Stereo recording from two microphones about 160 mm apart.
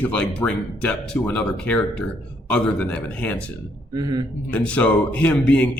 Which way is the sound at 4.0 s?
25° right (ahead or behind).